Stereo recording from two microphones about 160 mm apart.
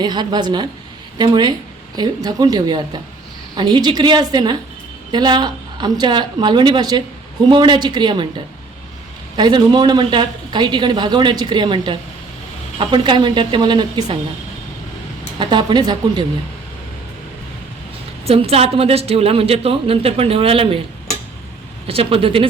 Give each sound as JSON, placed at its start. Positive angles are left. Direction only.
{"t": 0.0, "sound": "a man's voice", "side_deg": -25}
{"t": 9.3, "sound": "a man's voice", "side_deg": -25}
{"t": 15.4, "sound": "a man's voice", "side_deg": -30}
{"t": 18.3, "sound": "a woman's voice", "side_deg": -40}
{"t": 21.8, "sound": "a woman's voice", "side_deg": -35}